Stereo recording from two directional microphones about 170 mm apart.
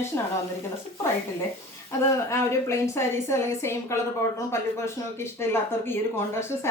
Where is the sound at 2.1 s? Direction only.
15° left (ahead or behind).